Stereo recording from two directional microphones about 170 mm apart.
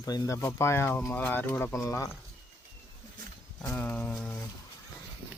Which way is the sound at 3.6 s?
10° left (ahead or behind).